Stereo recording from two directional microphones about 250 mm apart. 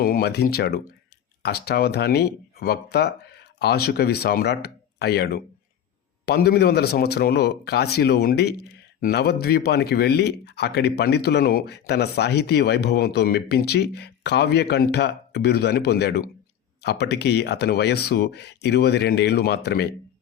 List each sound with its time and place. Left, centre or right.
0.0 s speech: left